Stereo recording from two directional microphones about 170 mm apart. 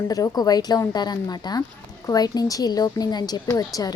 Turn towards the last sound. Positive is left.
turn(degrees=20)  # may be behind; listen again after turning